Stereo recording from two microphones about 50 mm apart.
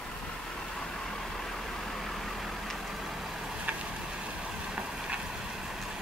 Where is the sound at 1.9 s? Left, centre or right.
Centre.